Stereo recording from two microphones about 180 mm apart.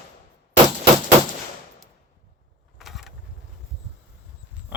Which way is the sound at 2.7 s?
Centre (ahead or behind).